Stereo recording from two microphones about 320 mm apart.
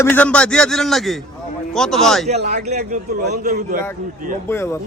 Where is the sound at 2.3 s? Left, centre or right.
Right.